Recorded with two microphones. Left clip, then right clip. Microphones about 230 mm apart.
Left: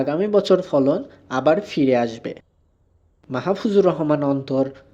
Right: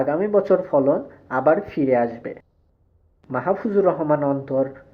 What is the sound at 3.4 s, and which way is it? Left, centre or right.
Speech, left.